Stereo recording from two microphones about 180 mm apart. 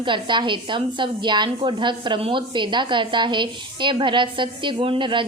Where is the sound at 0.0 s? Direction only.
25° right (ahead or behind).